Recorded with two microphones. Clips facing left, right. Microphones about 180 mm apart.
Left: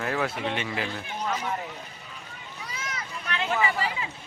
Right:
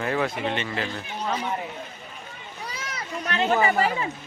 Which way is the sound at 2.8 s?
40° right (ahead or behind).